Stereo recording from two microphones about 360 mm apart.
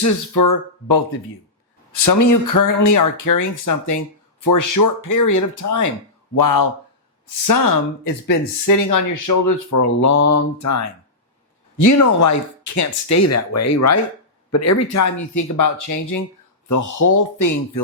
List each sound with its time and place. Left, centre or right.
0.0 s speech: left
6.3 s speech: left
8.0 s speech: left